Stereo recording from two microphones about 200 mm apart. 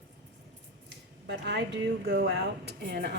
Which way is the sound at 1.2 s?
65° right (ahead or behind).